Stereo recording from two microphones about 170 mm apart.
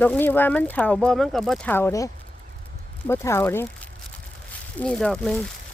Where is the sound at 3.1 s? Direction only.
15° left (ahead or behind).